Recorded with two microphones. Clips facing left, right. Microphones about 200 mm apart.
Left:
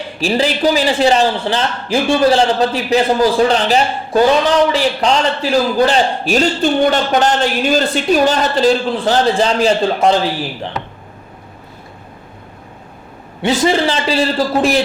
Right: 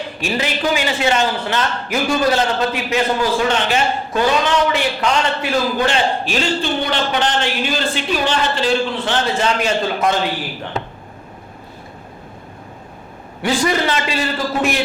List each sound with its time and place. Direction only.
0.2 s a man's voice: 30° left (ahead or behind)
13.4 s a man's voice: 25° left (ahead or behind)